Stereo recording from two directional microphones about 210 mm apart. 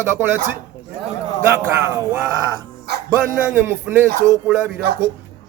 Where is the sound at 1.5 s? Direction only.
15° right (ahead or behind).